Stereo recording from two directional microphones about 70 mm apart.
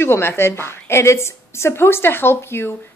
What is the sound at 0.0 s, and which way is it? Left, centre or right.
A woman's voice, left.